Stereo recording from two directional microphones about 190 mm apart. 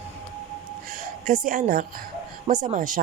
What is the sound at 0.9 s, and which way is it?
A woman's voice, 45° right (ahead or behind).